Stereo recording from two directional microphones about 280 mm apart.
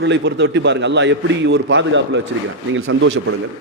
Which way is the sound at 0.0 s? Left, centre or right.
Right.